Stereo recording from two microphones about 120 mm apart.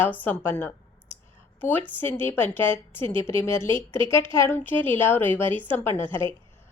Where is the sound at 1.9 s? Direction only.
20° left (ahead or behind).